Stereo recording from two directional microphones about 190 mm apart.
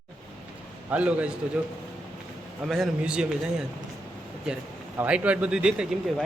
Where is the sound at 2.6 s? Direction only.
Centre (ahead or behind).